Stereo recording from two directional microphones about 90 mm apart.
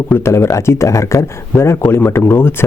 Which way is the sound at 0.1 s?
30° left (ahead or behind).